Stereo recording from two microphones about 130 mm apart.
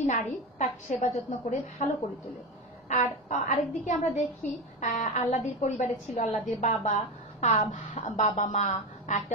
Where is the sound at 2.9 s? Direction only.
70° left (ahead or behind).